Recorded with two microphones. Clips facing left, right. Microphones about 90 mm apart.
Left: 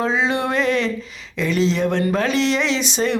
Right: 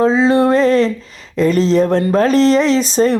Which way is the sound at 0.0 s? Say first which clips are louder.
Right 8 dB; 35° right (ahead or behind).